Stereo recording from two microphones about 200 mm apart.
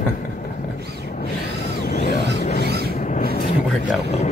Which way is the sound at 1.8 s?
45° left (ahead or behind).